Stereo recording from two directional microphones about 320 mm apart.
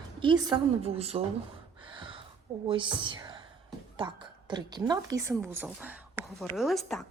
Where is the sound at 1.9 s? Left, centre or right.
Centre.